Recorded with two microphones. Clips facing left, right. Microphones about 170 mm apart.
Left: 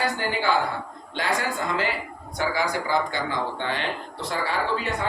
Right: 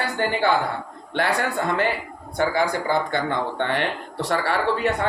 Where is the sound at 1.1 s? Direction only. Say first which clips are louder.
Right 4 dB; 65° right (ahead or behind).